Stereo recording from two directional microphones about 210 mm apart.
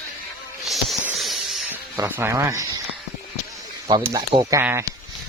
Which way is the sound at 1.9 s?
15° right (ahead or behind).